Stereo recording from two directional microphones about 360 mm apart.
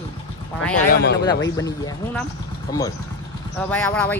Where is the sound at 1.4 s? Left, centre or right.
Centre.